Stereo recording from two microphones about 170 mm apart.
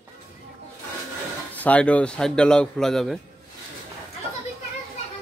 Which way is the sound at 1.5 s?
10° left (ahead or behind).